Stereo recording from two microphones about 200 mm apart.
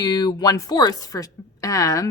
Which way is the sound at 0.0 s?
20° left (ahead or behind).